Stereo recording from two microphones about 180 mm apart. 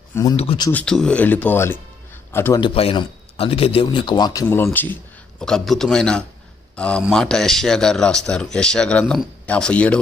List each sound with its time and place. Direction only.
0.1 s speech: 20° left (ahead or behind)
0.4 s speech: 30° left (ahead or behind)
0.7 s speech: 5° left (ahead or behind)
2.5 s a man's voice: 30° left (ahead or behind); by 6.2 s 5° left (ahead or behind)
6.7 s a sound: 5° left (ahead or behind)
7.0 s a man's voice: centre (ahead or behind)